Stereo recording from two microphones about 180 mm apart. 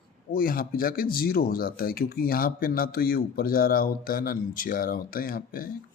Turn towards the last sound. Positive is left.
turn(degrees=55)  # may be behind; listen again after turning